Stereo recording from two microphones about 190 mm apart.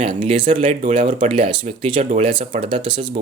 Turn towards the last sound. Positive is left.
turn(degrees=-25)  # may be behind; listen again after turning